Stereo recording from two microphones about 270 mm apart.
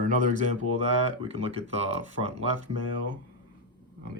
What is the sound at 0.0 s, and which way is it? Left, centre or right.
Speech, right.